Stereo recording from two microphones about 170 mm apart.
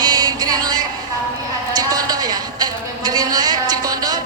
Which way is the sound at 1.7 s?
20° right (ahead or behind).